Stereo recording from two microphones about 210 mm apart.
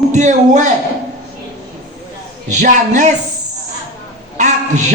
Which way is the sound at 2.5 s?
35° right (ahead or behind).